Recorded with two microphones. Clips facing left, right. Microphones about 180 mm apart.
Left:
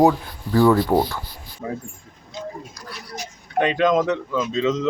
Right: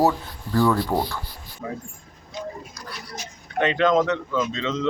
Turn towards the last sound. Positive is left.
turn(degrees=10)  # may be behind; listen again after turning